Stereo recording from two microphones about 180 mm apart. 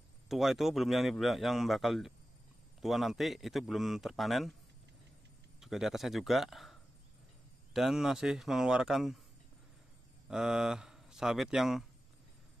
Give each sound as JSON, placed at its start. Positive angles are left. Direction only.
{"t": 0.3, "sound": "a man's voice", "side_deg": 0}
{"t": 5.6, "sound": "a man's voice", "side_deg": 0}
{"t": 10.2, "sound": "speech", "side_deg": -5}